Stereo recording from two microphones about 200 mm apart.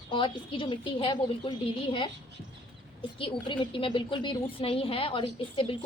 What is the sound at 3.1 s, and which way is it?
A woman's voice, 25° left (ahead or behind).